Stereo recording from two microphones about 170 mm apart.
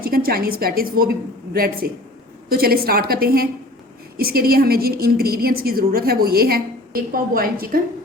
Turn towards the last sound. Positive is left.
turn(degrees=-60)  # may be behind; listen again after turning